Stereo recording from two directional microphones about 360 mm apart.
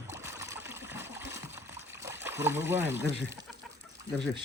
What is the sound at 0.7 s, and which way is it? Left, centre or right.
Stream, centre.